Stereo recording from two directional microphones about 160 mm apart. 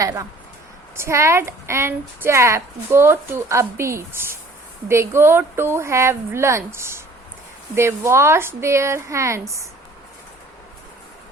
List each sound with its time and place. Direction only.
0.0 s a woman's voice: 20° right (ahead or behind)